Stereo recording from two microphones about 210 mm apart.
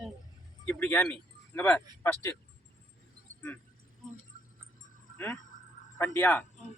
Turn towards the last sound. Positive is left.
turn(degrees=10)  # may be behind; listen again after turning